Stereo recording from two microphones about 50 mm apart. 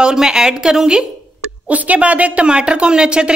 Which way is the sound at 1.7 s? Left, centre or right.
Right.